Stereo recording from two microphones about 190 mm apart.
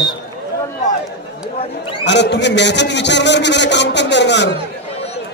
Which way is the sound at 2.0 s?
65° left (ahead or behind).